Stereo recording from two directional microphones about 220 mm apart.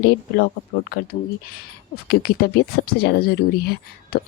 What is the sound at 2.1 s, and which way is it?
Speech, 45° left (ahead or behind).